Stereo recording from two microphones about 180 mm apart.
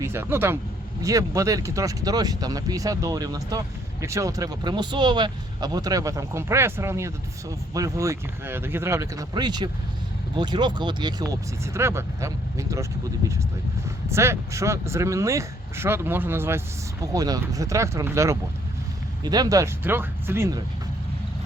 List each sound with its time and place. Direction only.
0.0 s speech: 15° right (ahead or behind)